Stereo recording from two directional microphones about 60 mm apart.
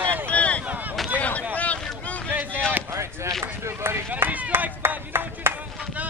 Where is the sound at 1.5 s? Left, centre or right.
Left.